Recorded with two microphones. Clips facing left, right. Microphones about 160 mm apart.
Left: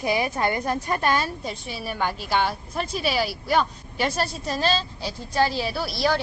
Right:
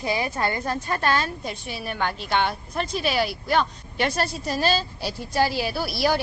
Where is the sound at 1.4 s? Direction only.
Centre (ahead or behind).